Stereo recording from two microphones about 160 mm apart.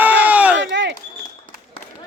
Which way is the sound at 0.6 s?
90° right.